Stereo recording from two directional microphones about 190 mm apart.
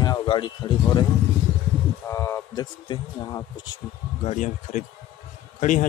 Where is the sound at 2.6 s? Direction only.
20° left (ahead or behind).